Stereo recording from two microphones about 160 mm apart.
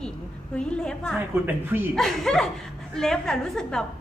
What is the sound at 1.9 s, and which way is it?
A woman's voice, centre (ahead or behind).